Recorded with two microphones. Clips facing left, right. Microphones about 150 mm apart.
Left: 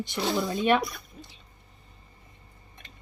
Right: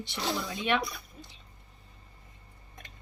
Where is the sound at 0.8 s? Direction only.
Centre (ahead or behind).